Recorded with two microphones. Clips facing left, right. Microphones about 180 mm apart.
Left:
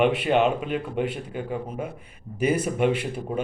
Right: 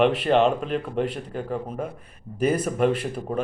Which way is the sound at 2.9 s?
5° left (ahead or behind).